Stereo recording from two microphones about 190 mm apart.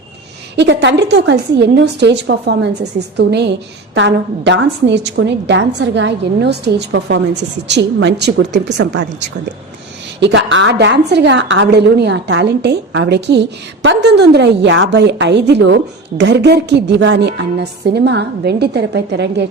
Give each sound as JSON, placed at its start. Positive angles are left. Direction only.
{"t": 0.5, "sound": "a woman's voice", "side_deg": -65}
{"t": 10.2, "sound": "a woman's voice", "side_deg": -70}